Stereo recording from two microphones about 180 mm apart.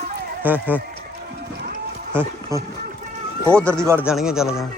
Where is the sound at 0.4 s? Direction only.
10° right (ahead or behind).